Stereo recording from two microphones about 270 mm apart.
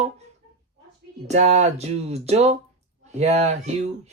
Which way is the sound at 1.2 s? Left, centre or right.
Right.